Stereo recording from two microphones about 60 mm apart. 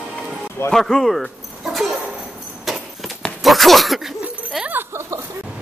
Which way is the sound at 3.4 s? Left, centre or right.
Centre.